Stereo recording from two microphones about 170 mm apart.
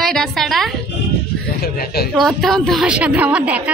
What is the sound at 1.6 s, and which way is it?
Speech, 65° left (ahead or behind).